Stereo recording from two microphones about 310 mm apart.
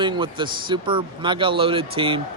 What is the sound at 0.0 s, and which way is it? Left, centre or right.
Speech, centre.